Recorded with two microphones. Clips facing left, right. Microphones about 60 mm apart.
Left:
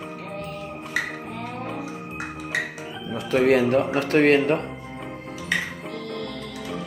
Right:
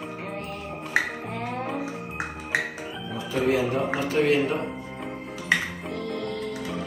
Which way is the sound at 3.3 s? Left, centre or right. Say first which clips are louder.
Left 5 dB; left.